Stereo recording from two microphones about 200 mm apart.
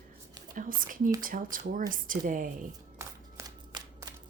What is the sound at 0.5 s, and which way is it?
A woman's voice, 45° right (ahead or behind).